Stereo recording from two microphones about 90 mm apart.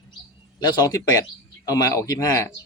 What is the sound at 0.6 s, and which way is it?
Speech, 50° left (ahead or behind).